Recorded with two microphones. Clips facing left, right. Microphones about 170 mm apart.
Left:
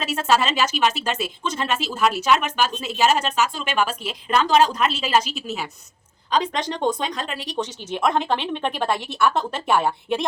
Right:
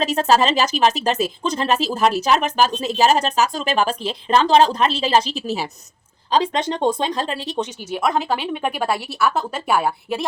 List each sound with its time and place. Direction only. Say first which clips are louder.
0.0 s speech: right 4 dB; 35° right (ahead or behind)
7.9 s speech: even; 5° right (ahead or behind)